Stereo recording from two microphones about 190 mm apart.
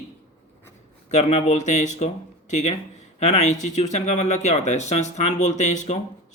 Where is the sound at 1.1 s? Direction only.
35° left (ahead or behind).